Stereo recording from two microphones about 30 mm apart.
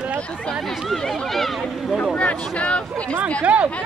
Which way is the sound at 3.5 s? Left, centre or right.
Right.